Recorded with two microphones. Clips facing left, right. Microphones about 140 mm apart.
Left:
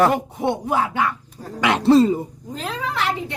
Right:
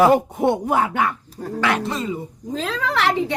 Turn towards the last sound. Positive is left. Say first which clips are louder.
# right 3 dB
turn(degrees=-90)